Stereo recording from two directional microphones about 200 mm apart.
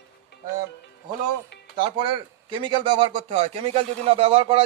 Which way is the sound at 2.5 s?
25° right (ahead or behind).